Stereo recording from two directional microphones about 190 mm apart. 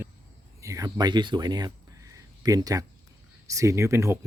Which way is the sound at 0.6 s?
15° right (ahead or behind).